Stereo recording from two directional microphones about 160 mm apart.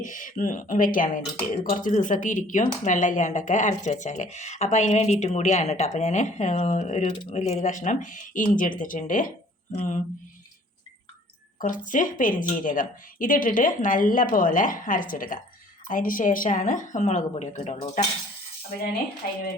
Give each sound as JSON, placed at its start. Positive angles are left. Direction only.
{"t": 0.0, "sound": "a woman's voice", "side_deg": 55}
{"t": 11.6, "sound": "a woman's voice", "side_deg": 55}